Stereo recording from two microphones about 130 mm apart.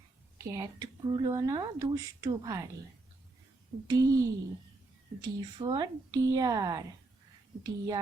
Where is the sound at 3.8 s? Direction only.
25° right (ahead or behind).